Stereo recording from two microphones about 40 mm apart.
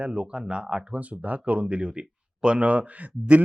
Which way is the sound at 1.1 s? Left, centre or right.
Right.